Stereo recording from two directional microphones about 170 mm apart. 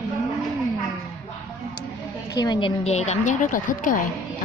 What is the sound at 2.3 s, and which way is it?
A woman's voice, 25° left (ahead or behind).